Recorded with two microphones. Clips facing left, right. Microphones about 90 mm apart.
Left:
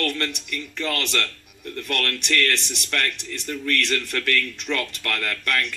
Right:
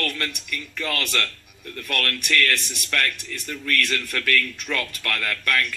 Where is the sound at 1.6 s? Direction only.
25° left (ahead or behind).